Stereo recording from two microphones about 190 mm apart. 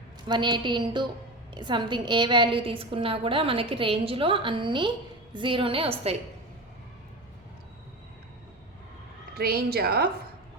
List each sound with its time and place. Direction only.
0.3 s a woman's voice: 25° right (ahead or behind)
9.3 s a woman's voice: 55° right (ahead or behind)